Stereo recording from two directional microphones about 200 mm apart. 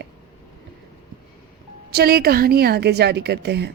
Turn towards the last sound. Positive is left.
turn(degrees=-55)  # may be behind; listen again after turning